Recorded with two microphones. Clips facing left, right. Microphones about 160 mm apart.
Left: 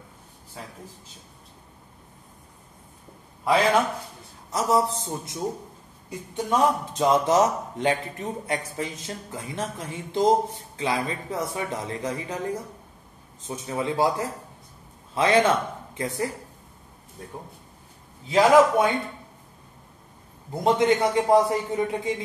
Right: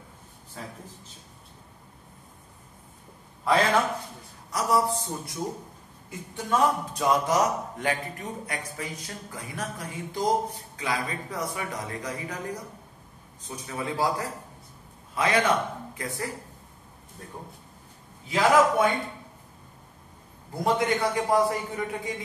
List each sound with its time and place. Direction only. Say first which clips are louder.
3.4 s a man's voice: left 2 dB; 10° left (ahead or behind)
4.5 s speech: left 2 dB; 25° left (ahead or behind)
13.5 s speech: left 5 dB; 25° left (ahead or behind)
18.3 s speech: left 4 dB; 25° left (ahead or behind)
20.6 s speech: left 4 dB; 25° left (ahead or behind)